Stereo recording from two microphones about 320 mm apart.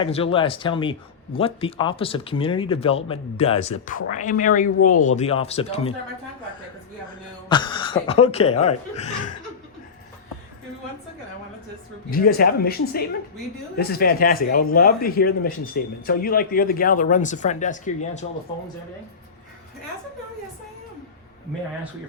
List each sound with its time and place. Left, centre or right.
0.0 s speech: centre
7.4 s speech: centre
12.1 s speech: left